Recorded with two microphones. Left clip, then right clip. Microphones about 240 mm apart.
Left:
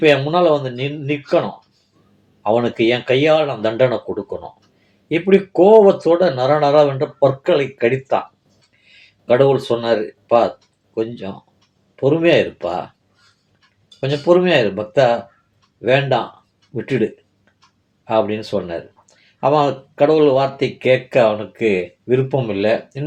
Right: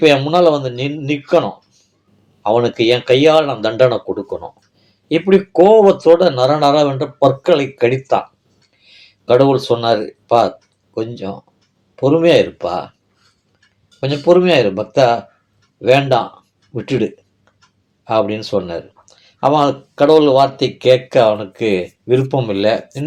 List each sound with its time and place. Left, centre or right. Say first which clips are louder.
0.0 s speech: right 3 dB; right
2.4 s speech: right 2 dB; right
5.0 s speech: right 2 dB; right
9.2 s speech: right 2 dB; right
11.9 s speech: right 3 dB; right
14.0 s speech: right 3 dB; right
18.0 s speech: right 2 dB; right